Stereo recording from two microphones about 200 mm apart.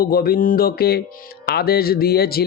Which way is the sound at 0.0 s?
50° left (ahead or behind).